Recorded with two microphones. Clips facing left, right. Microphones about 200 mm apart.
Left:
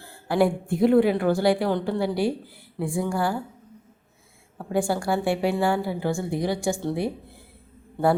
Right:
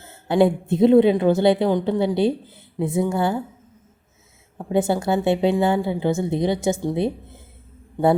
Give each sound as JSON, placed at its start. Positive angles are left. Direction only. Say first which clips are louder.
{"t": 0.0, "sound": "a woman's voice", "louder": "right 4 dB", "side_deg": -20}
{"t": 4.5, "sound": "a woman's voice", "louder": "right 4 dB", "side_deg": -20}